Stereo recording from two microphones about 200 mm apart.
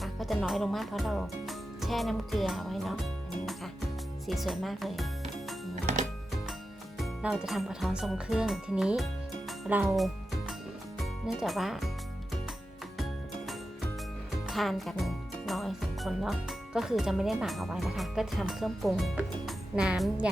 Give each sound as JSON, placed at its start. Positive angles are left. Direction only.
{"t": 0.0, "sound": "speech", "side_deg": 0}
{"t": 5.7, "sound": "music", "side_deg": -40}
{"t": 7.0, "sound": "speech", "side_deg": 0}
{"t": 9.5, "sound": "music", "side_deg": -5}
{"t": 11.0, "sound": "speech", "side_deg": 0}
{"t": 14.4, "sound": "speech", "side_deg": 0}